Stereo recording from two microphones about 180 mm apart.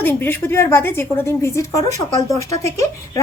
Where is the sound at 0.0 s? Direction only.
10° left (ahead or behind).